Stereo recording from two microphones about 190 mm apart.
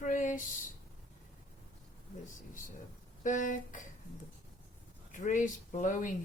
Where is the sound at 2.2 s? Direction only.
45° left (ahead or behind).